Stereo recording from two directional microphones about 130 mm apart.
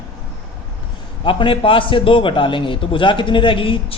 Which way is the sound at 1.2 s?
40° left (ahead or behind).